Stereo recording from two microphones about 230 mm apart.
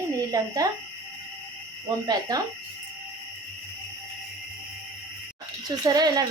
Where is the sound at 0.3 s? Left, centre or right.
Centre.